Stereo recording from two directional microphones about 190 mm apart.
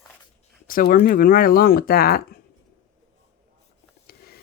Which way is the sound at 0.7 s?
50° left (ahead or behind).